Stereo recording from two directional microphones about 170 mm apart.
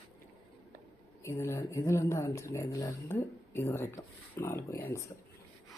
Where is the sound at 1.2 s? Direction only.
15° left (ahead or behind).